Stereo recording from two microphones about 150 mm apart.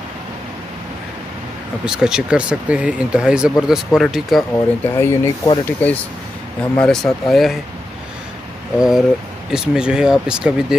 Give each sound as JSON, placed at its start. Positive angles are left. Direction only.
{"t": 1.9, "sound": "speech", "side_deg": -5}
{"t": 4.9, "sound": "speech", "side_deg": 15}
{"t": 8.7, "sound": "speech", "side_deg": -5}